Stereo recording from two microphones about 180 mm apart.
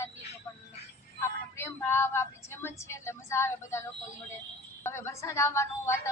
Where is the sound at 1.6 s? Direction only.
15° left (ahead or behind).